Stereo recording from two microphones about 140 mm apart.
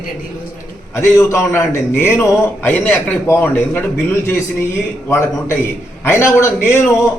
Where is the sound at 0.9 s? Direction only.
20° left (ahead or behind).